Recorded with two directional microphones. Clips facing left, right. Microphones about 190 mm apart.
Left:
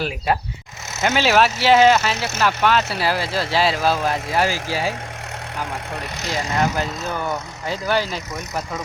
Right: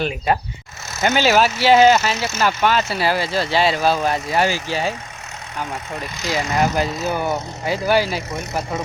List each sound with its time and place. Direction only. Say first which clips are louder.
1.0 s speech: right 1 dB; centre (ahead or behind)
2.1 s speech: right 2 dB; 60° left (ahead or behind)
2.4 s speech: even; centre (ahead or behind)
6.3 s speech: right 2 dB; 10° right (ahead or behind)